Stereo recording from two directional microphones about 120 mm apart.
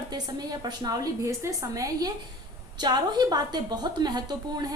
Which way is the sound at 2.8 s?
35° right (ahead or behind).